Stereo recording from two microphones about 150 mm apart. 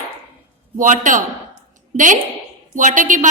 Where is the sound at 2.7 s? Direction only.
60° right (ahead or behind).